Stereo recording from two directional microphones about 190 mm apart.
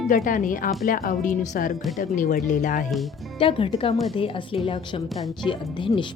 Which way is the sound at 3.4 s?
25° left (ahead or behind).